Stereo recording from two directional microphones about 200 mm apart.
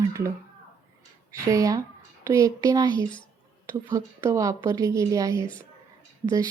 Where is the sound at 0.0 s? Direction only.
15° right (ahead or behind).